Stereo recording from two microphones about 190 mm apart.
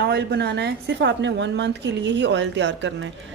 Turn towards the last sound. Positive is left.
turn(degrees=-70)  # may be behind; listen again after turning